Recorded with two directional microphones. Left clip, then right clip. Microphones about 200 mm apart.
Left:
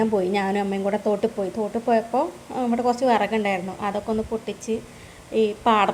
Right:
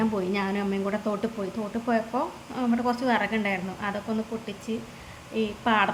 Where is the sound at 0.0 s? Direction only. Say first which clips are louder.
Left 6 dB; 20° left (ahead or behind).